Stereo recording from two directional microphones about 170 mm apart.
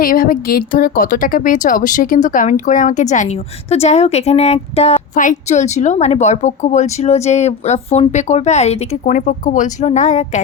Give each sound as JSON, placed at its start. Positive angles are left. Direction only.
{"t": 0.0, "sound": "speech", "side_deg": 55}